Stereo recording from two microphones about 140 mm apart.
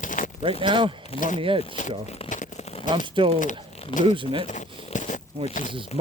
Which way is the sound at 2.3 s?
65° left (ahead or behind).